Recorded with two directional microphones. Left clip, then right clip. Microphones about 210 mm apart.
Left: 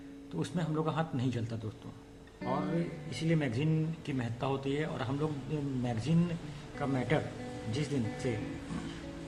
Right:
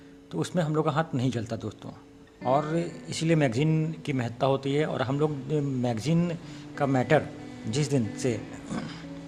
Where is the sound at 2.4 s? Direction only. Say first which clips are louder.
Right 11 dB; centre (ahead or behind).